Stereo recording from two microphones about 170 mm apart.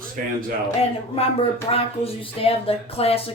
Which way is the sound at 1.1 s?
35° left (ahead or behind).